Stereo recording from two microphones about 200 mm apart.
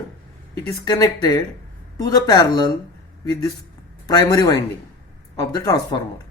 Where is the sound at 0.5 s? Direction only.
20° left (ahead or behind).